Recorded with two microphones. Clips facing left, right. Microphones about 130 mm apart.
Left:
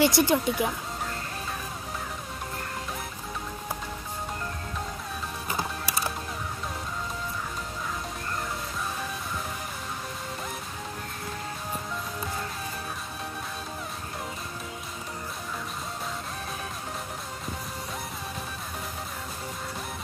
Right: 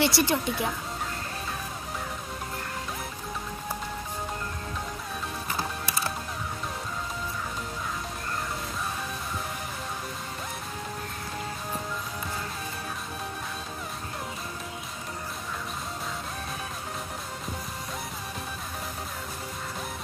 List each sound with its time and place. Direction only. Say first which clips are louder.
0.0 s speech: left 3 dB; 15° left (ahead or behind)